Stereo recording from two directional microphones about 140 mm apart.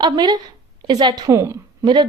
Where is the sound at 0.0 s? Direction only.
30° right (ahead or behind).